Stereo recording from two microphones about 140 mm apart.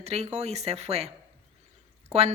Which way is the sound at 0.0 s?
50° right (ahead or behind).